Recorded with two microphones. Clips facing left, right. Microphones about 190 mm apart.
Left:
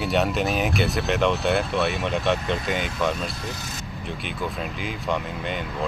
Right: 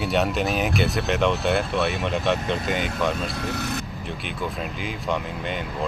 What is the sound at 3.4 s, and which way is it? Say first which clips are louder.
Speech: right 6 dB; 65° right (ahead or behind).